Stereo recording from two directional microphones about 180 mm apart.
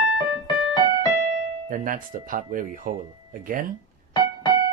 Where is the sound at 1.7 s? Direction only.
50° right (ahead or behind).